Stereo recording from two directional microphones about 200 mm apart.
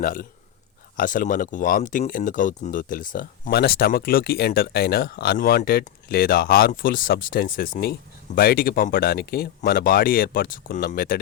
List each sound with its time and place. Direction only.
0.0 s speech: 45° left (ahead or behind)